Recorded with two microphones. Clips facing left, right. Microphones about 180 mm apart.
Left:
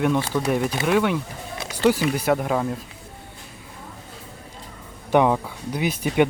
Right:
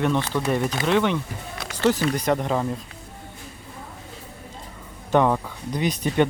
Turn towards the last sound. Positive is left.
turn(degrees=5)  # may be behind; listen again after turning